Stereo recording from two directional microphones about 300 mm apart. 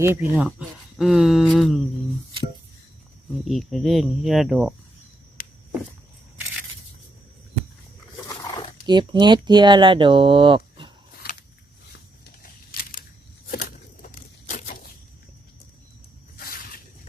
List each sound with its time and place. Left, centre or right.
0.0 s speech: centre
3.3 s speech: centre
8.9 s speech: centre
12.2 s a sound: left
16.4 s snake: left